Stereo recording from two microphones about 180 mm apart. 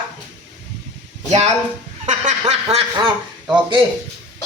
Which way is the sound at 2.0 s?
40° right (ahead or behind).